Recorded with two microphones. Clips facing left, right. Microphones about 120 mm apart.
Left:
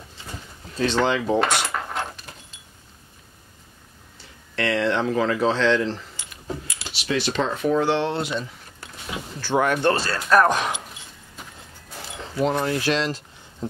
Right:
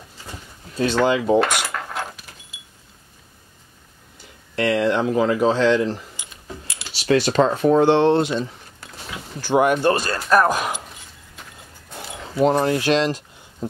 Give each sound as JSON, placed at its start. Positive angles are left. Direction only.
{"t": 0.8, "sound": "keys jangling", "side_deg": -10}
{"t": 4.2, "sound": "speech", "side_deg": -10}
{"t": 6.7, "sound": "speech", "side_deg": -35}
{"t": 9.4, "sound": "speech", "side_deg": -15}
{"t": 11.9, "sound": "speech", "side_deg": -20}